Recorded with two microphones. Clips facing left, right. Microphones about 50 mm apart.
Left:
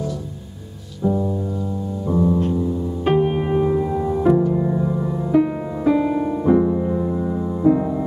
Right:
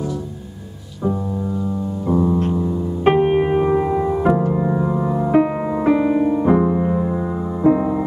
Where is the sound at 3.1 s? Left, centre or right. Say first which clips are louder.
Right 4 dB; right.